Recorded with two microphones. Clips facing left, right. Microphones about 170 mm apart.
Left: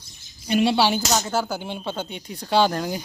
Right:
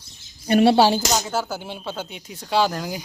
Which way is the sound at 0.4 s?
55° right (ahead or behind).